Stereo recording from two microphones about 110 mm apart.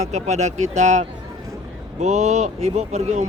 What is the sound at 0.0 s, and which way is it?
Speech, 90° right.